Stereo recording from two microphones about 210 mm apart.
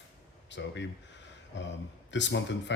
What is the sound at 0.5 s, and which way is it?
Speech, 60° left (ahead or behind).